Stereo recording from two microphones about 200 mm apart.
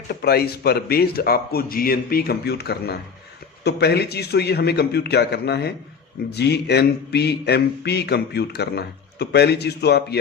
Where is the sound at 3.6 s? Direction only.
55° left (ahead or behind).